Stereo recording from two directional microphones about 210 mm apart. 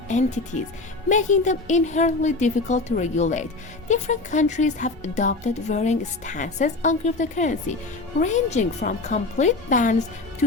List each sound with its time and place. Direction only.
0.1 s speech: 35° left (ahead or behind)